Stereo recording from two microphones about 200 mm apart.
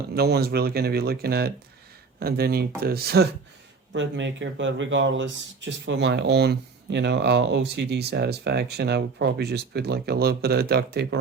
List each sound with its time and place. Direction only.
0.1 s speech: 50° right (ahead or behind)
3.9 s speech: 65° right (ahead or behind)